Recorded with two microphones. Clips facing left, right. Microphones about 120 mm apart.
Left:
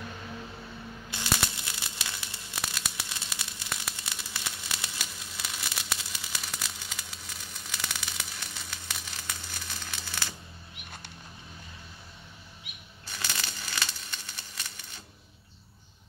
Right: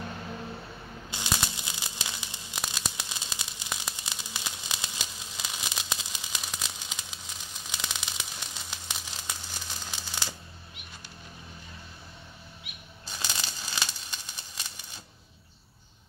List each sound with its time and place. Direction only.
1.1 s tearing: 20° right (ahead or behind)
3.0 s static: 15° right (ahead or behind)
13.1 s tearing: 15° right (ahead or behind)